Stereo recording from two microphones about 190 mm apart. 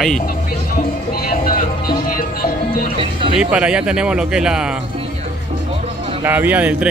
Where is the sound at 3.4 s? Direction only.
5° right (ahead or behind).